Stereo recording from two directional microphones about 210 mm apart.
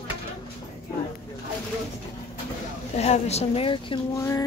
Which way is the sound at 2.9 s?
30° left (ahead or behind).